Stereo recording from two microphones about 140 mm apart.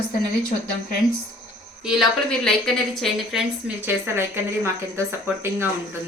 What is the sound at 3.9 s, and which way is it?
Speech, 15° right (ahead or behind).